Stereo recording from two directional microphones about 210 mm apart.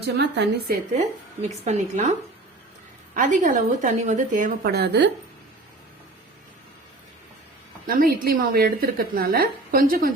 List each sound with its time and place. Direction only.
0.0 s a woman's voice: 50° right (ahead or behind)
0.9 s a woman's voice: 30° right (ahead or behind)
3.2 s a woman's voice: 35° right (ahead or behind)
7.9 s a woman's voice: 45° right (ahead or behind)